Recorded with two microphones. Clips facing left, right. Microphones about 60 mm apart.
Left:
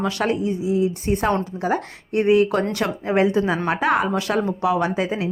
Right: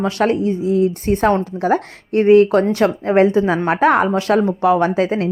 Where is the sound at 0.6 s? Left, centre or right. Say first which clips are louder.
Right 4 dB; right.